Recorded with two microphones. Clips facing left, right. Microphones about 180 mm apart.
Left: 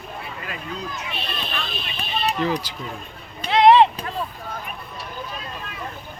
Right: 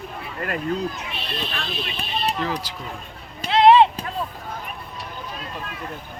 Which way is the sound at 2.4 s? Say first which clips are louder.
Left 3 dB; centre (ahead or behind).